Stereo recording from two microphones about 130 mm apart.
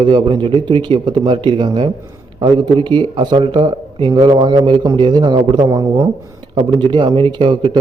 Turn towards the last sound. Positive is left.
turn(degrees=-40)  # may be behind; listen again after turning